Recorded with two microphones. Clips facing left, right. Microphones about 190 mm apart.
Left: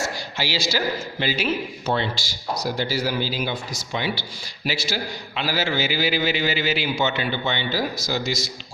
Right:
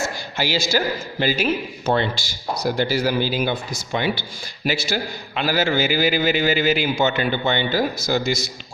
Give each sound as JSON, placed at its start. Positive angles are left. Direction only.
{"t": 0.3, "sound": "a man's voice", "side_deg": -50}